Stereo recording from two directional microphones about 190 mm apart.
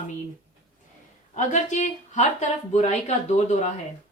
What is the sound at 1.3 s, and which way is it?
Speech, 40° left (ahead or behind).